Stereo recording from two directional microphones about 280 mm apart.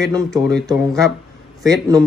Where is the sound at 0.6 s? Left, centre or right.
Centre.